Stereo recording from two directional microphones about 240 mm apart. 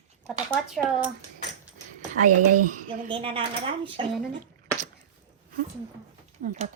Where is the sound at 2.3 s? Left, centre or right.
Right.